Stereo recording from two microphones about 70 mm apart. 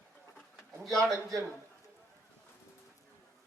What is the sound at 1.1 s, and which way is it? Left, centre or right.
Speech, right.